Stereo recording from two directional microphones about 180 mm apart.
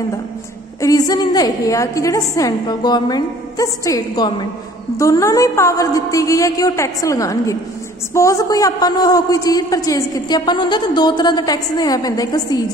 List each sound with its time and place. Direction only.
0.7 s a man's voice: 20° left (ahead or behind)